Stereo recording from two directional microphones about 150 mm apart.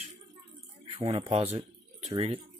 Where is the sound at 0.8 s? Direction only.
35° right (ahead or behind).